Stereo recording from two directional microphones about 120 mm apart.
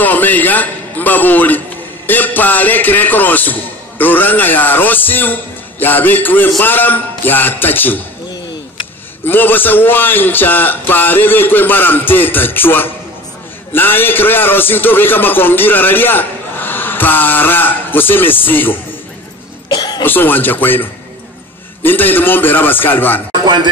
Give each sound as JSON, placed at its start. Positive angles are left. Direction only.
{"t": 0.0, "sound": "a man's voice", "side_deg": 15}
{"t": 9.2, "sound": "a man's voice", "side_deg": 15}
{"t": 19.7, "sound": "cough", "side_deg": 35}
{"t": 20.0, "sound": "a man's voice", "side_deg": 15}
{"t": 23.3, "sound": "a man's voice", "side_deg": -40}